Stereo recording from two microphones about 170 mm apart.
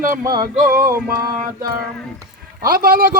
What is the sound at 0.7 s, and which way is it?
Speech, 60° right (ahead or behind).